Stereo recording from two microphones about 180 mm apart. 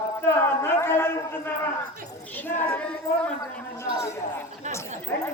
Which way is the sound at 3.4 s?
15° left (ahead or behind).